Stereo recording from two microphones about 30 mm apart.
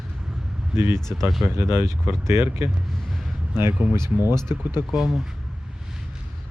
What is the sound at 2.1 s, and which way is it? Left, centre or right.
Speech, right.